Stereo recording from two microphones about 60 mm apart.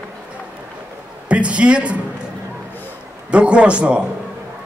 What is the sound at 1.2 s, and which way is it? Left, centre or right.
Speech, right.